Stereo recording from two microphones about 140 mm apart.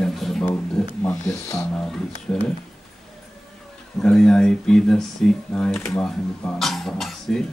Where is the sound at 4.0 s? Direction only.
5° left (ahead or behind).